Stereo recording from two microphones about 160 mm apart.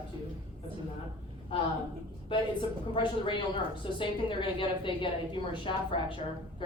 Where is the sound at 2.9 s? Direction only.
30° left (ahead or behind).